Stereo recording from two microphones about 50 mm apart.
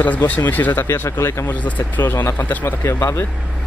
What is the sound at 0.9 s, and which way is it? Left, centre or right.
Speech, left.